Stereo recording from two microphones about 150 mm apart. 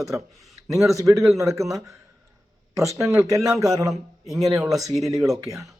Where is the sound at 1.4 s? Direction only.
20° right (ahead or behind).